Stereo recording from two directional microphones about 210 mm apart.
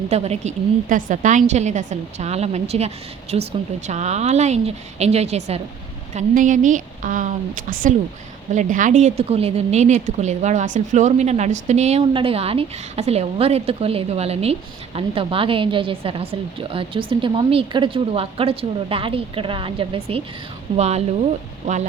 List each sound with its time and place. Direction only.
0.1 s a woman's voice: 30° right (ahead or behind)